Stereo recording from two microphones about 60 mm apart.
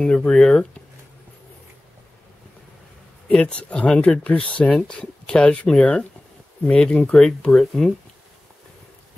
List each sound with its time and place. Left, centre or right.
0.0 s speech: centre
3.3 s speech: centre
7.2 s speech: centre